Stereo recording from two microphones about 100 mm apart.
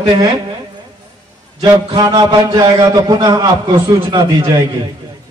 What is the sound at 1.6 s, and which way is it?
A man's voice, 40° right (ahead or behind).